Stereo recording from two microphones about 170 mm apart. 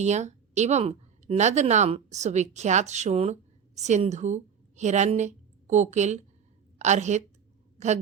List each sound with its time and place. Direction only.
0.0 s a woman's voice: 40° right (ahead or behind)